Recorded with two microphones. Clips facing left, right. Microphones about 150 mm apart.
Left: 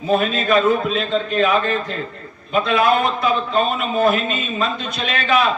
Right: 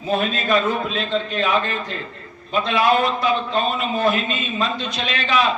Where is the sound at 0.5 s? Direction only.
45° left (ahead or behind).